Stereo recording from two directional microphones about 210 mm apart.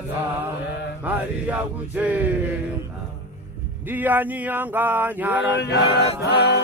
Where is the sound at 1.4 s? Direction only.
5° right (ahead or behind).